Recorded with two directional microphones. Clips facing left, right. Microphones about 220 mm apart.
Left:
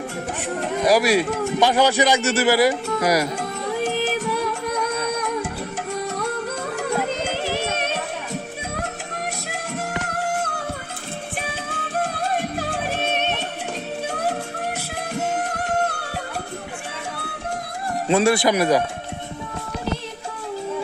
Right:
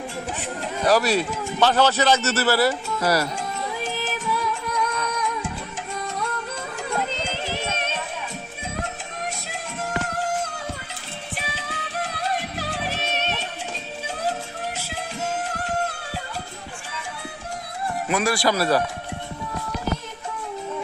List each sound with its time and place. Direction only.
0.8 s a man's voice: 10° left (ahead or behind)
3.3 s music: 60° left (ahead or behind)
10.2 s music: 60° left (ahead or behind)
11.3 s music: 50° left (ahead or behind)
18.1 s a man's voice: 25° left (ahead or behind)